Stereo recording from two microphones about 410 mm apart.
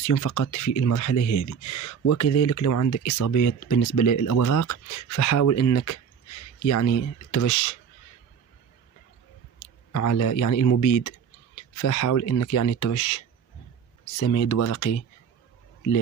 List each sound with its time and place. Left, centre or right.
0.0 s speech: left
9.9 s speech: left
14.2 s speech: left